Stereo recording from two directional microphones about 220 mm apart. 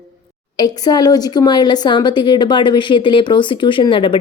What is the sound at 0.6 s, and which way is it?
A woman's voice, 20° left (ahead or behind).